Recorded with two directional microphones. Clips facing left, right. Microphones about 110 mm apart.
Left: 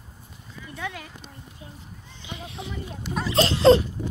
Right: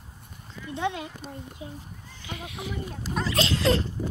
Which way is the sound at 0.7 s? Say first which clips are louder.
Right 6 dB; 25° right (ahead or behind).